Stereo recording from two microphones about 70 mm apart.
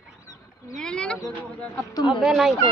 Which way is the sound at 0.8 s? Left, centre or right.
Centre.